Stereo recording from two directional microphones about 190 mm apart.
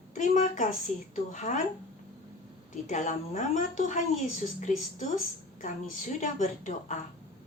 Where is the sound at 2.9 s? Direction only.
40° left (ahead or behind).